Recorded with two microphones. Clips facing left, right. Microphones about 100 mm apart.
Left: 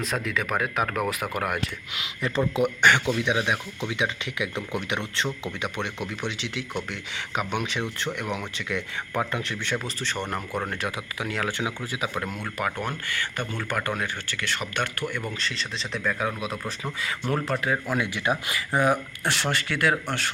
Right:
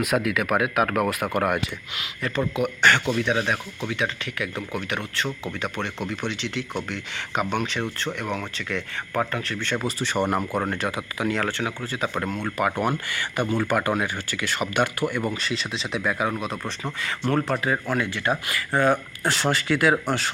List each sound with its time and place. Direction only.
0.0 s speech: 10° right (ahead or behind)
2.0 s speech: 20° left (ahead or behind)
9.7 s speech: 10° right (ahead or behind)
11.5 s speech: 15° left (ahead or behind)
17.8 s speech: 10° left (ahead or behind)
19.2 s speech: centre (ahead or behind)